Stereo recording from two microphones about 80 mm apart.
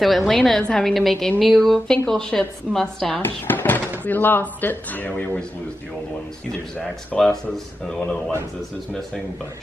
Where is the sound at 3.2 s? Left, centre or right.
Left.